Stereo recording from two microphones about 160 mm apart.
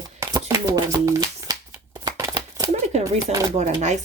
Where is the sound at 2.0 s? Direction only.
20° right (ahead or behind).